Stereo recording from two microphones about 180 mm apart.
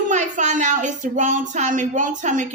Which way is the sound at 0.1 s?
45° right (ahead or behind).